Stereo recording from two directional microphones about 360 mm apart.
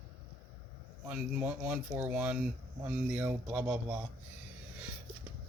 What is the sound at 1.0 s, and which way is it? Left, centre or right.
Speech, centre.